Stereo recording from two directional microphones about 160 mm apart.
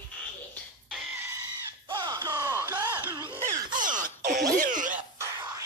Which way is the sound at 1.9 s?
25° right (ahead or behind).